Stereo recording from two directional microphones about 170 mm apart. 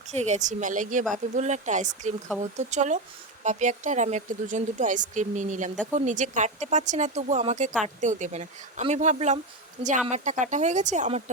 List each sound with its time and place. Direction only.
0.1 s speech: 45° right (ahead or behind)